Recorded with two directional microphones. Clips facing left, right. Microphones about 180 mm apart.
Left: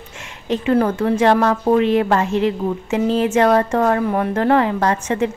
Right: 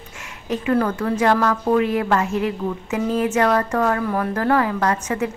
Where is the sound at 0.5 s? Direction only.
25° left (ahead or behind).